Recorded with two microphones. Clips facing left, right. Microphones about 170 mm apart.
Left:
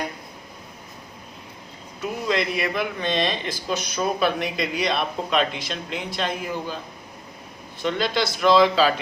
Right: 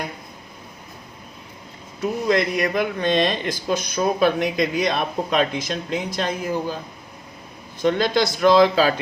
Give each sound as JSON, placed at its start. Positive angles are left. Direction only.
{"t": 2.0, "sound": "speech", "side_deg": -45}
{"t": 7.8, "sound": "speech", "side_deg": -45}